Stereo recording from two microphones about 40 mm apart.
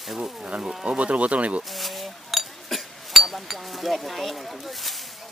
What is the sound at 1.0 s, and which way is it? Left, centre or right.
Speech, right.